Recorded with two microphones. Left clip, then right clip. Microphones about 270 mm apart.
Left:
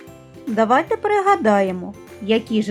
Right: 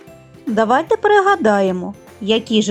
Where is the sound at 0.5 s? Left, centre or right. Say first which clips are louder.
Right 2 dB; centre.